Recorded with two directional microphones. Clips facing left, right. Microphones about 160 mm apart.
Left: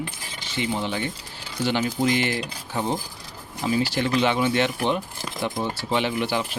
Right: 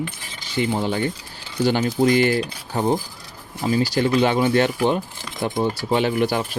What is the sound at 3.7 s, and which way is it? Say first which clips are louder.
Speech: right 4 dB; 40° right (ahead or behind).